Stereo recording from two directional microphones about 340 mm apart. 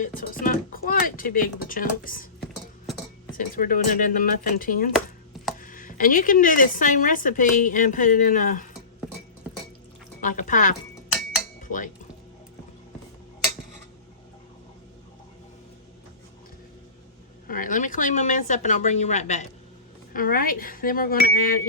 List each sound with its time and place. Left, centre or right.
0.0 s speech: left
3.3 s speech: left
10.2 s speech: left
11.6 s dishes: left
17.4 s speech: left